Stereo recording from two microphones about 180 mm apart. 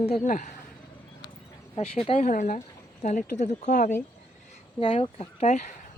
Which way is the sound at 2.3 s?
45° left (ahead or behind).